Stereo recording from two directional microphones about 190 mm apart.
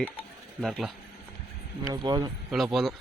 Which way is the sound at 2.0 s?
20° right (ahead or behind).